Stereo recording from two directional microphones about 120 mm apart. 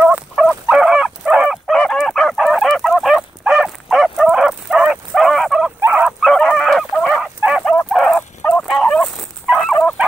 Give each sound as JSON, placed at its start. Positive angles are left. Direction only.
{"t": 0.0, "sound": "fowl", "side_deg": -15}
{"t": 0.7, "sound": "bow-wow", "side_deg": -5}
{"t": 1.8, "sound": "fowl", "side_deg": 5}
{"t": 5.8, "sound": "a sound", "side_deg": -15}
{"t": 6.0, "sound": "fowl", "side_deg": 0}
{"t": 7.9, "sound": "dog", "side_deg": 5}
{"t": 8.4, "sound": "fowl", "side_deg": 15}
{"t": 8.8, "sound": "dog", "side_deg": 5}